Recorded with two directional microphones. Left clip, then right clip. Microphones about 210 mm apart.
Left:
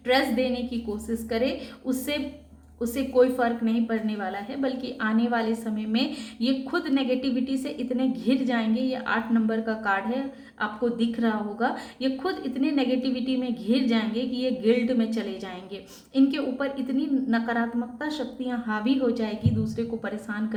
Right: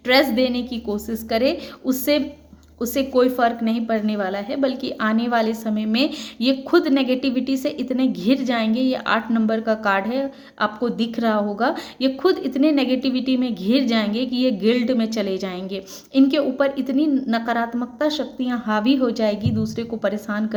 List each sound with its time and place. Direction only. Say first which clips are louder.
0.1 s a woman's voice: right 6 dB; 45° right (ahead or behind)